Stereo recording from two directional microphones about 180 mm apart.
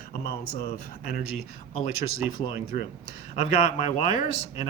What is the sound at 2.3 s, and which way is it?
Speech, 40° left (ahead or behind).